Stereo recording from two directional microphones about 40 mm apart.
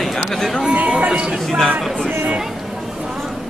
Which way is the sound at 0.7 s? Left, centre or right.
Right.